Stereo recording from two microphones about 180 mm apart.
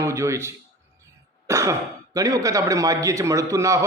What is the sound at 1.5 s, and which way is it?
Throat clearing, 15° right (ahead or behind).